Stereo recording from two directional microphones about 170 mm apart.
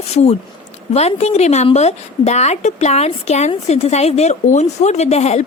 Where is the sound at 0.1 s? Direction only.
40° left (ahead or behind).